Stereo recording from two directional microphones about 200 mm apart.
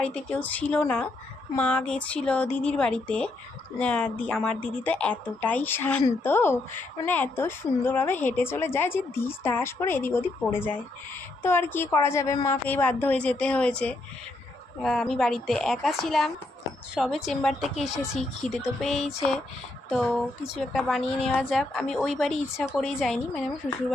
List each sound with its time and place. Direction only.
0.0 s a woman's voice: 5° left (ahead or behind)